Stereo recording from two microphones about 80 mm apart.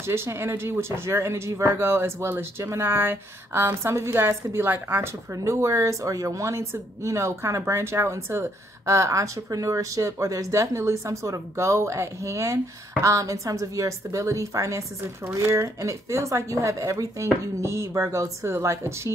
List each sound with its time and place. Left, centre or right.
0.0 s speech: right
5.3 s speech: right